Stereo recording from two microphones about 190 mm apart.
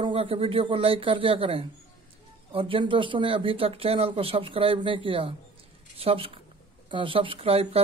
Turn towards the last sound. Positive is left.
turn(degrees=-30)  # may be behind; listen again after turning